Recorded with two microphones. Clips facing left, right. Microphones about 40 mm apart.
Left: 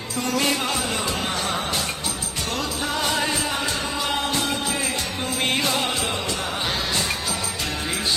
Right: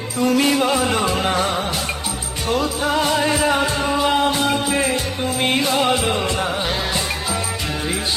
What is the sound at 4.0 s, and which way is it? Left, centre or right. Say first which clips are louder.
Music: right 7 dB; centre.